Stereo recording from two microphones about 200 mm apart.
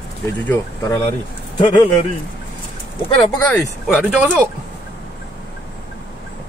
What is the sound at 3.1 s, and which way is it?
Speech, 20° left (ahead or behind).